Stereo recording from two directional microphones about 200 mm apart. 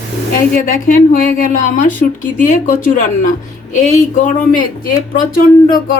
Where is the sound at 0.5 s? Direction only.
45° left (ahead or behind).